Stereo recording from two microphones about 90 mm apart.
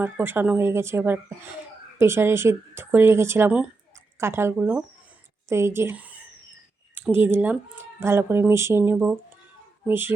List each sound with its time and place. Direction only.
0.0 s speech: 25° right (ahead or behind)
7.1 s speech: 25° right (ahead or behind)